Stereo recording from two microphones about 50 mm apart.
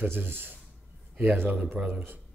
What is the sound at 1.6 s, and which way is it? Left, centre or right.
Speech, right.